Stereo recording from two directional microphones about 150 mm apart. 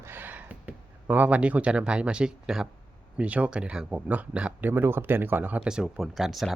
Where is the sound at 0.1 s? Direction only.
10° right (ahead or behind).